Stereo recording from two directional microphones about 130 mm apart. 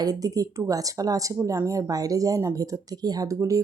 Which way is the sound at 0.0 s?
30° right (ahead or behind).